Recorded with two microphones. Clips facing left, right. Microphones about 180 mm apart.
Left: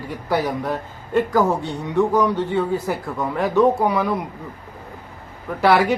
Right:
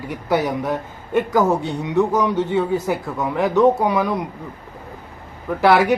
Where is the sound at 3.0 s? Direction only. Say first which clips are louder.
Right 2 dB; centre (ahead or behind).